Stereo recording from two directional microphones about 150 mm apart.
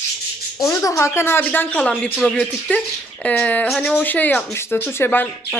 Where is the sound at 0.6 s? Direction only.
20° left (ahead or behind).